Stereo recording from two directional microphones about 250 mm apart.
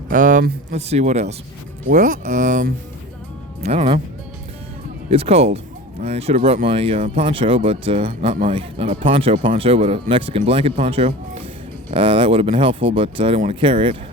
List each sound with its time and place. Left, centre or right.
0.1 s speech: right
5.1 s speech: right